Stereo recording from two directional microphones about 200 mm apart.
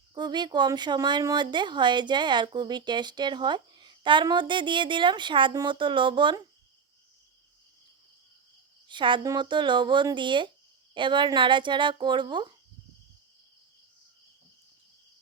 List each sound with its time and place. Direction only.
0.1 s speech: 20° right (ahead or behind)
8.9 s speech: 25° right (ahead or behind)